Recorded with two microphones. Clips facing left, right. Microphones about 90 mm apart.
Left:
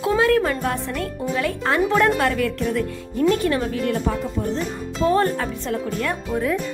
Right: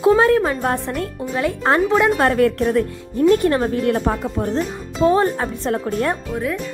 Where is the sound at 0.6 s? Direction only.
35° right (ahead or behind).